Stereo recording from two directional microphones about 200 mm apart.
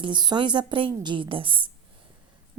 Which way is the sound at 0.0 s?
20° right (ahead or behind).